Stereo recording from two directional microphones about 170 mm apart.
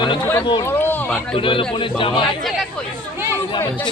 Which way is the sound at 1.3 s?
30° left (ahead or behind).